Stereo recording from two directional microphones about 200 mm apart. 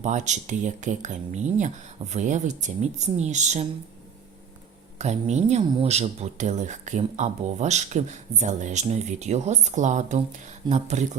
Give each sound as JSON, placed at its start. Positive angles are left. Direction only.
{"t": 0.0, "sound": "speech", "side_deg": -35}
{"t": 4.9, "sound": "speech", "side_deg": -35}